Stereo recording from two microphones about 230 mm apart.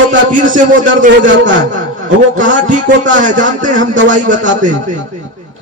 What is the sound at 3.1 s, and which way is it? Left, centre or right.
Speech, right.